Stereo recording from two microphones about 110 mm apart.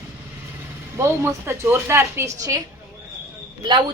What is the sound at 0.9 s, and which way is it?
Speech, 25° right (ahead or behind).